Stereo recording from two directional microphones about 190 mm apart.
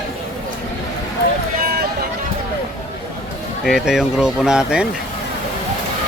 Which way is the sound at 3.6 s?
5° right (ahead or behind).